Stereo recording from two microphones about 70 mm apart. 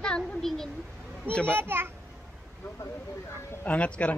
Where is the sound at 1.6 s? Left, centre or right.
Right.